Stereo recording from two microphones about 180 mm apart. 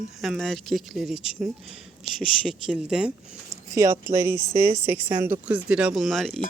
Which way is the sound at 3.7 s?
15° right (ahead or behind).